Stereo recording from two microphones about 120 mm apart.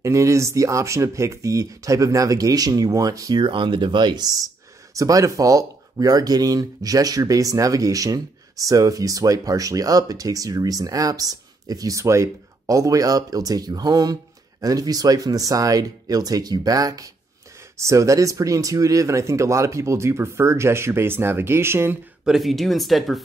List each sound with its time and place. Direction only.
0.0 s speech: 25° right (ahead or behind)
22.2 s speech: centre (ahead or behind)